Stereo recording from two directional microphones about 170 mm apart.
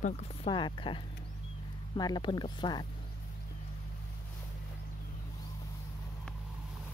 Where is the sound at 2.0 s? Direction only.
25° left (ahead or behind).